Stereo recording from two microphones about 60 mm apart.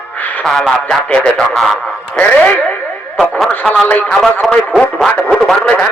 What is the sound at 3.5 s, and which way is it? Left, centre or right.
Snicker, left.